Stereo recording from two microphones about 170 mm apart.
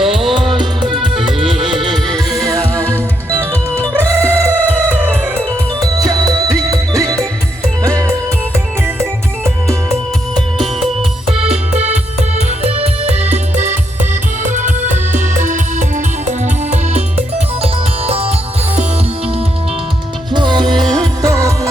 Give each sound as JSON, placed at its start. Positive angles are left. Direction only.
{"t": 0.0, "sound": "music", "side_deg": 0}
{"t": 0.3, "sound": "music", "side_deg": -30}
{"t": 1.4, "sound": "music", "side_deg": 0}
{"t": 1.7, "sound": "music", "side_deg": -30}
{"t": 2.5, "sound": "music", "side_deg": -15}
{"t": 12.6, "sound": "music", "side_deg": -40}
{"t": 20.3, "sound": "music", "side_deg": -25}